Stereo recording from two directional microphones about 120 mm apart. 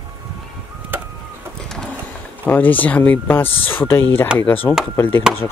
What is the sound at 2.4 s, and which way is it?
Speech, 15° left (ahead or behind).